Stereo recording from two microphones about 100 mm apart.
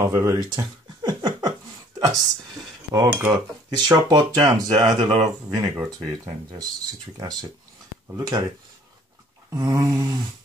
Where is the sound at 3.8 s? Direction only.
45° right (ahead or behind).